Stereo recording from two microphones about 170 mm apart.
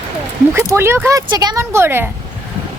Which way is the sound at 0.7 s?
15° right (ahead or behind).